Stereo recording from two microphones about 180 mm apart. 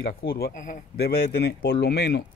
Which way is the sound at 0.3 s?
60° left (ahead or behind).